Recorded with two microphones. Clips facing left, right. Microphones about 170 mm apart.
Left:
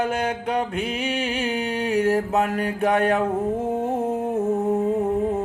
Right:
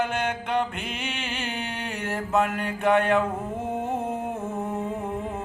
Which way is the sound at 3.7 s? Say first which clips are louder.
Left 5 dB; 35° left (ahead or behind).